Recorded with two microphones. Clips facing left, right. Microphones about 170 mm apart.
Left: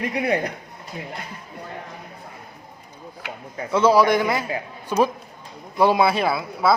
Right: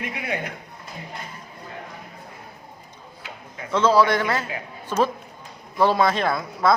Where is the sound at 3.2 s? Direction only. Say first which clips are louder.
Left 5 dB; 65° left (ahead or behind).